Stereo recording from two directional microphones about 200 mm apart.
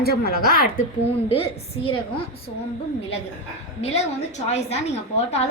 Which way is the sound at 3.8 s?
30° left (ahead or behind).